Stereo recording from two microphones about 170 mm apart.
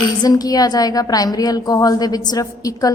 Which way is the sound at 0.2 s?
20° left (ahead or behind).